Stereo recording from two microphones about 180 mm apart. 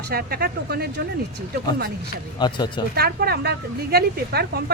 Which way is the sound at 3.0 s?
60° right (ahead or behind).